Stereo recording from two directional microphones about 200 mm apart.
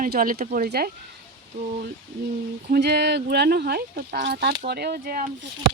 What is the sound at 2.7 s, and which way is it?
Speech, 55° right (ahead or behind).